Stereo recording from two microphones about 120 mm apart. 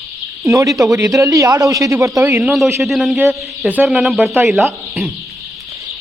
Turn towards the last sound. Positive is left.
turn(degrees=0)  # may be behind; listen again after turning